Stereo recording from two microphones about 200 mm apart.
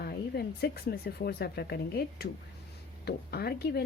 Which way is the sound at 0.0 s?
50° left (ahead or behind).